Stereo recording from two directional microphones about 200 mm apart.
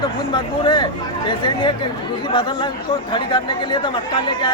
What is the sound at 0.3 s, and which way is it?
Speech, 25° left (ahead or behind).